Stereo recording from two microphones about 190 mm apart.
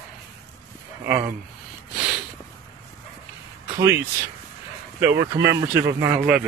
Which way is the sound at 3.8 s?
15° right (ahead or behind).